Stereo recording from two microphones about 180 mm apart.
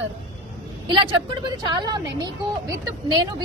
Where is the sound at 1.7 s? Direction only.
25° right (ahead or behind).